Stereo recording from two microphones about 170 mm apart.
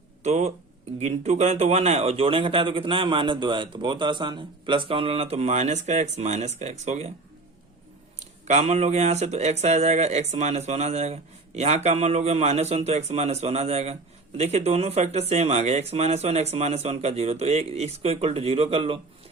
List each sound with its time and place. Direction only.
0.2 s speech: 40° right (ahead or behind)
8.2 s speech: 40° right (ahead or behind)